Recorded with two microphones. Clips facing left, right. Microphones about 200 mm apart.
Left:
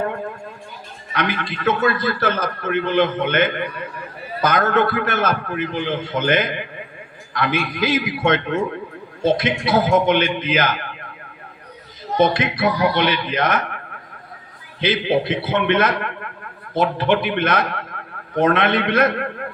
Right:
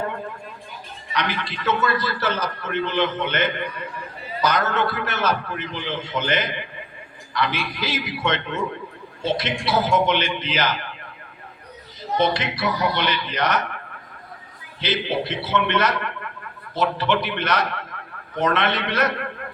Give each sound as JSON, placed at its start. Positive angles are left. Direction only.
{"t": 1.1, "sound": "a man's voice", "side_deg": 55}
{"t": 12.1, "sound": "a man's voice", "side_deg": 50}
{"t": 14.8, "sound": "a man's voice", "side_deg": 55}